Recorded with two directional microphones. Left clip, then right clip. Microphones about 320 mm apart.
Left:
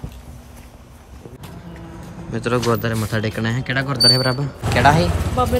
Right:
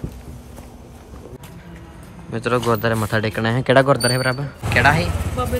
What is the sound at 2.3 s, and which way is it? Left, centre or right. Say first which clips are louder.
Speech: even; centre.